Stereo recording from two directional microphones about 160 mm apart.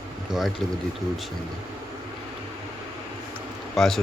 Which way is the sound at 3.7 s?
Centre (ahead or behind).